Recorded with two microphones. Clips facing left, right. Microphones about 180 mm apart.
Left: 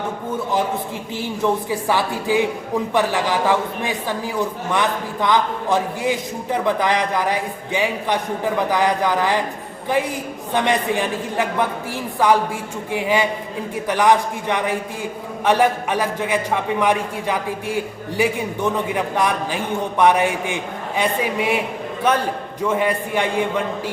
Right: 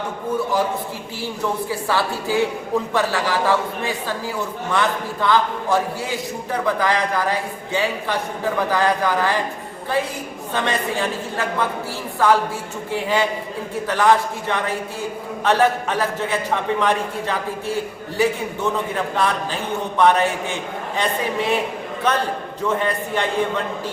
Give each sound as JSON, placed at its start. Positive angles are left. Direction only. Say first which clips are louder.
{"t": 1.9, "sound": "a man's voice", "louder": "left 2 dB", "side_deg": 15}
{"t": 10.5, "sound": "a man's voice", "louder": "left 3 dB", "side_deg": 15}